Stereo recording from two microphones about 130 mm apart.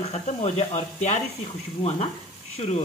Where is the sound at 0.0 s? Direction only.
55° left (ahead or behind).